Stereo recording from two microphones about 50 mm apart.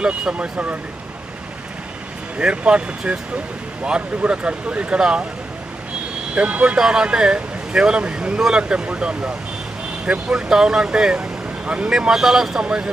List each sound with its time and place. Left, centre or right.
0.0 s speech: right
2.4 s speech: right
4.2 s speech: right
6.3 s speech: right
6.7 s speech: centre
10.5 s speech: centre
11.2 s vehicle: right
11.9 s speech: centre